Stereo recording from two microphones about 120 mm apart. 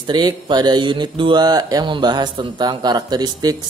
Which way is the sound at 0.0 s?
40° right (ahead or behind).